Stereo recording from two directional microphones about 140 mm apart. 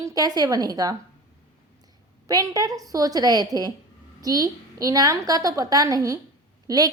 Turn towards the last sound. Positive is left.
turn(degrees=-25)  # may be behind; listen again after turning